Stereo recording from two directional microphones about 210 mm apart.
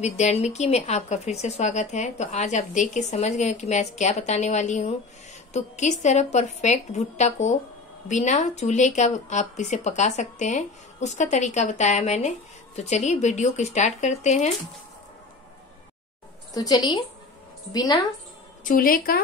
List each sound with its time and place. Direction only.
0.0 s speech: 30° left (ahead or behind)
16.5 s a woman's voice: 20° left (ahead or behind)
18.6 s a woman's voice: 40° left (ahead or behind)